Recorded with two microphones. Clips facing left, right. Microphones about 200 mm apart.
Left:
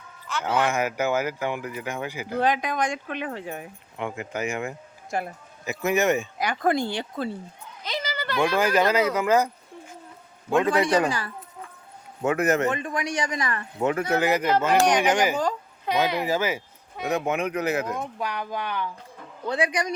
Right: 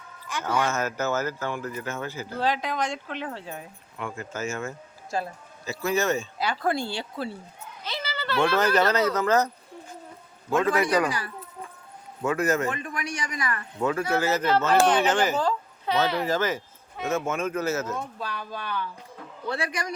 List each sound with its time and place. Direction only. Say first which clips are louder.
0.6 s speech: left 4 dB; 15° left (ahead or behind)
10.8 s speech: left 2 dB; 30° left (ahead or behind)
12.2 s speech: left 2 dB; 20° left (ahead or behind)